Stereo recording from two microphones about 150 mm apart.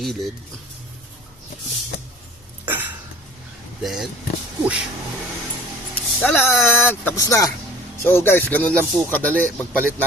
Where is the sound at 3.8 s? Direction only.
Centre (ahead or behind).